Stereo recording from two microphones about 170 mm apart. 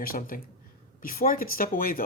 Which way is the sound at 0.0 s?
55° left (ahead or behind).